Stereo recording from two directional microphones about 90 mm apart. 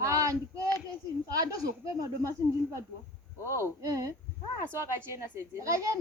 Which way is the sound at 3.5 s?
35° right (ahead or behind).